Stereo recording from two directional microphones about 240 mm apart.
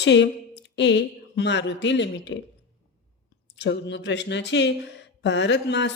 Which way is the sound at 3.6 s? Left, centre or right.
Left.